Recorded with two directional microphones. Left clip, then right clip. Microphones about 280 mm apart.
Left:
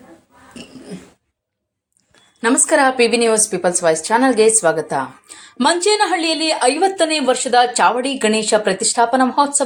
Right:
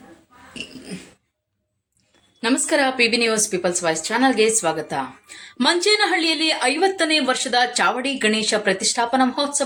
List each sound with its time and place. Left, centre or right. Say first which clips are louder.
2.4 s a woman's voice: left 5 dB; centre